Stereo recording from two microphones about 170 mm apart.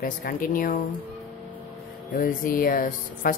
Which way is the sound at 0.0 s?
55° left (ahead or behind).